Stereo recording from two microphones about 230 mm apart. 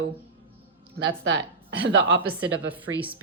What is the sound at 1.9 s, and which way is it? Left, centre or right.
Speech, right.